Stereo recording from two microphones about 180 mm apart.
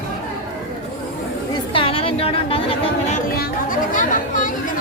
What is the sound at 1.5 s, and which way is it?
Chatter, 30° left (ahead or behind).